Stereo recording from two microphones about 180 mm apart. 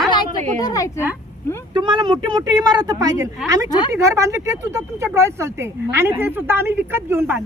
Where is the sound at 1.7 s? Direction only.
25° right (ahead or behind).